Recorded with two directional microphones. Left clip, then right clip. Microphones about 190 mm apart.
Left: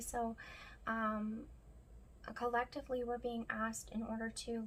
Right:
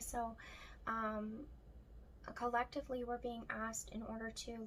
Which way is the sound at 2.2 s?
20° left (ahead or behind).